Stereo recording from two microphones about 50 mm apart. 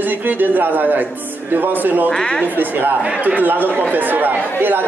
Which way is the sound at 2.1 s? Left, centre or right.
Centre.